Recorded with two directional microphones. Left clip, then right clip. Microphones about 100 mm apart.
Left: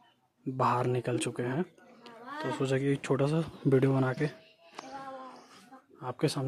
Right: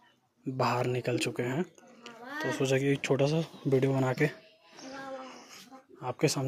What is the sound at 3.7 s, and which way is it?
Speech, 55° left (ahead or behind).